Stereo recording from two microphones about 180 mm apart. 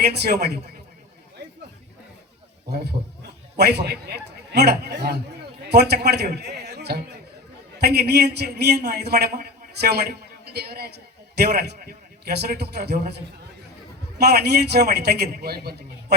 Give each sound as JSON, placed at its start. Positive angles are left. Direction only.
{"t": 0.1, "sound": "a man's voice", "side_deg": -65}
{"t": 1.4, "sound": "a sound", "side_deg": -70}
{"t": 2.6, "sound": "a man's voice", "side_deg": -65}